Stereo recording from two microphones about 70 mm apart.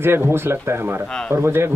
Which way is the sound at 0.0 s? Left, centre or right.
Right.